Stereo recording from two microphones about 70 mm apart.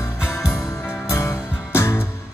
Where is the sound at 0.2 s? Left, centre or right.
Centre.